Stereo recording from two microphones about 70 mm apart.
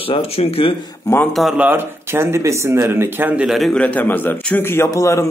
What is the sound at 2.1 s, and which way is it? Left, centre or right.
Speech, right.